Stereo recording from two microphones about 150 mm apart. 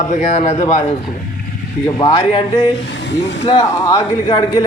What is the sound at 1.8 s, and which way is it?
Speech, 30° left (ahead or behind).